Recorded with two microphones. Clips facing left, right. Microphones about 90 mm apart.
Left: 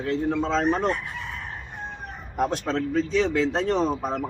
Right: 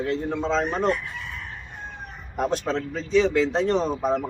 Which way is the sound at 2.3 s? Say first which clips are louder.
Even; centre (ahead or behind).